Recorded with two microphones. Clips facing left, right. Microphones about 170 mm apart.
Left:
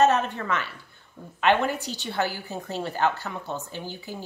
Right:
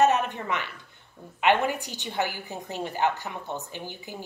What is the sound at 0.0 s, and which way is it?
A woman's voice, 15° right (ahead or behind).